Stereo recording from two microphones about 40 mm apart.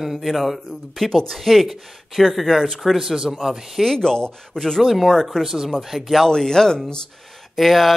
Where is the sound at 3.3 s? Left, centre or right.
Centre.